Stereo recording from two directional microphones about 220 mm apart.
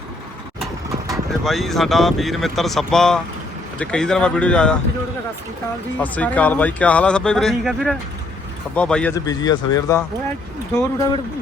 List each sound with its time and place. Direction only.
1.1 s speech: centre (ahead or behind)
6.0 s speech: 5° left (ahead or behind)
9.1 s speech: 15° left (ahead or behind)